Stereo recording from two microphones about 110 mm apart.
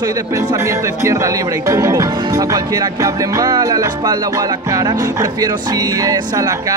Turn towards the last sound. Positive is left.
turn(degrees=-30)  # may be behind; listen again after turning